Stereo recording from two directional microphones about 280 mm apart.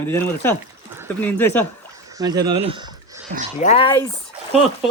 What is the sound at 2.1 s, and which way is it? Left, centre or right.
Speech, centre.